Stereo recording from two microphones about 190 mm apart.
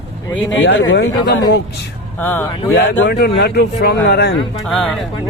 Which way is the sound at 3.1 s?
60° left (ahead or behind).